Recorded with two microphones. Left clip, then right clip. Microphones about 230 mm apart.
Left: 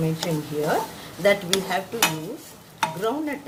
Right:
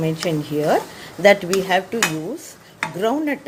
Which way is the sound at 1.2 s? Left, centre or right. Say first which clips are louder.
Right 6 dB; right.